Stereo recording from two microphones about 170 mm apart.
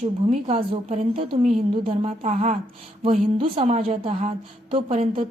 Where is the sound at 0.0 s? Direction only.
40° right (ahead or behind).